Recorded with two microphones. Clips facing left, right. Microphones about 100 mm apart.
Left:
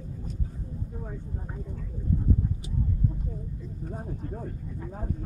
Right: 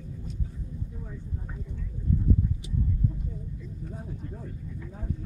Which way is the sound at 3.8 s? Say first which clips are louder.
Left 4 dB; 45° left (ahead or behind).